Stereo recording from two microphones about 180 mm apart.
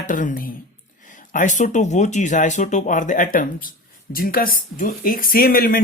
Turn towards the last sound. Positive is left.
turn(degrees=55)  # may be behind; listen again after turning